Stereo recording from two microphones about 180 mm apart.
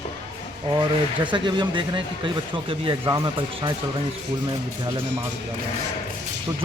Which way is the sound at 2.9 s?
25° right (ahead or behind).